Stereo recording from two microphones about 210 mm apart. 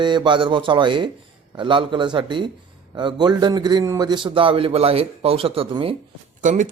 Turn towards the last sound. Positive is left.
turn(degrees=-35)  # may be behind; listen again after turning